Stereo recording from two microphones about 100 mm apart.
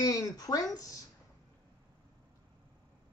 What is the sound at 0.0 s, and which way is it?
Speech, 35° left (ahead or behind).